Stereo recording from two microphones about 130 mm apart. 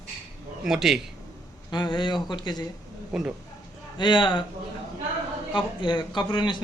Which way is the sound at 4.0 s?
40° left (ahead or behind).